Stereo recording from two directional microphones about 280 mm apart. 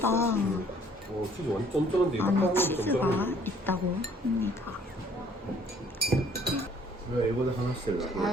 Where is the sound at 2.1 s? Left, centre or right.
Centre.